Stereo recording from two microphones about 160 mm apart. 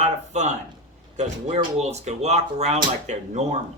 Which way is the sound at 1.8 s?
45° right (ahead or behind).